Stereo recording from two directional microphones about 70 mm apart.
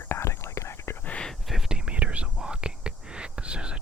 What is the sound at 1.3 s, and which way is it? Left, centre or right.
Whispering, centre.